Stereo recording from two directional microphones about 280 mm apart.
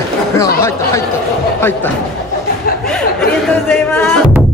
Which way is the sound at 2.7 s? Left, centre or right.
Left.